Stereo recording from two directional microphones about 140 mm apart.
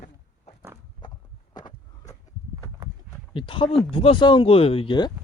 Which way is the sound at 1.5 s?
30° left (ahead or behind).